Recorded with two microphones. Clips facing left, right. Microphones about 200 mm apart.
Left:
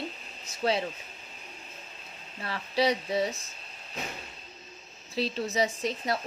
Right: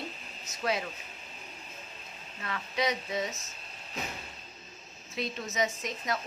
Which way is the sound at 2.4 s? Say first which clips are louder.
Left 5 dB; 35° left (ahead or behind).